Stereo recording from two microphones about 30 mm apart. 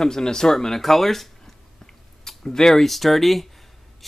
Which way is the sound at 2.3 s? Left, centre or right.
Centre.